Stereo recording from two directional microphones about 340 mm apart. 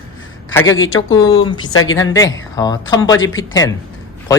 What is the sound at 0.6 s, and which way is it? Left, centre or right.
Speech, left.